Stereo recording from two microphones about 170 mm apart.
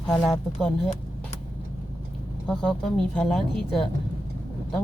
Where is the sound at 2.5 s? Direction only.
5° left (ahead or behind).